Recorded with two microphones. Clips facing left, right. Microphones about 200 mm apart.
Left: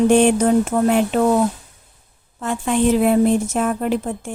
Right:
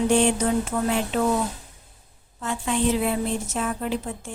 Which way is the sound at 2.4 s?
55° left (ahead or behind).